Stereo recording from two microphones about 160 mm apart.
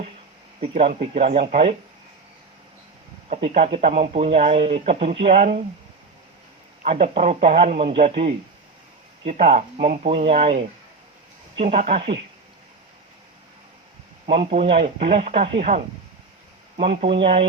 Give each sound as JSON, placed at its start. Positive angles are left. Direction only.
{"t": 0.6, "sound": "speech", "side_deg": -40}
{"t": 3.2, "sound": "speech", "side_deg": -45}
{"t": 6.8, "sound": "speech", "side_deg": -40}
{"t": 9.5, "sound": "speech", "side_deg": -50}
{"t": 10.2, "sound": "speech", "side_deg": -40}
{"t": 14.3, "sound": "speech", "side_deg": -40}
{"t": 17.0, "sound": "speech", "side_deg": -35}